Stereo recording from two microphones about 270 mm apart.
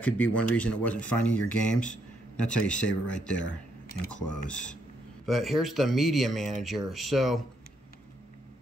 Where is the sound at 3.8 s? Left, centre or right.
Left.